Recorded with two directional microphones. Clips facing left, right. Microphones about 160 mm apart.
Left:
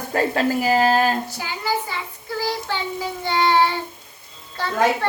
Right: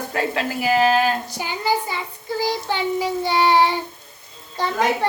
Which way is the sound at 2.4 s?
15° right (ahead or behind).